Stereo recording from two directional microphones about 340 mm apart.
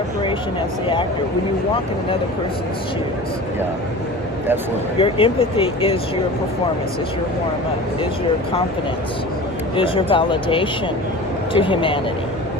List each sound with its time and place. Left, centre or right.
4.9 s speech: centre
9.7 s speech: centre